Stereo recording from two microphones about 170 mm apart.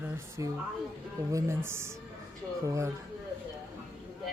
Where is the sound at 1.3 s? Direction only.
15° right (ahead or behind).